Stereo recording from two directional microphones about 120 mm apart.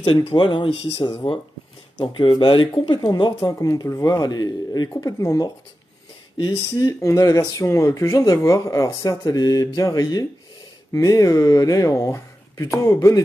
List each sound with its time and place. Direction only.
0.3 s speech: 40° left (ahead or behind)
3.3 s speech: 25° left (ahead or behind)